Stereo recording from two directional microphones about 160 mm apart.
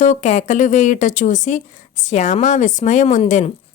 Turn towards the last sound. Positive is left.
turn(degrees=50)  # may be behind; listen again after turning